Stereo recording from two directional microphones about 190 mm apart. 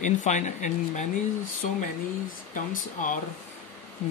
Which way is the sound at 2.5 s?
45° left (ahead or behind).